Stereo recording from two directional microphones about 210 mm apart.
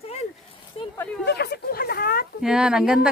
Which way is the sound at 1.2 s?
50° left (ahead or behind).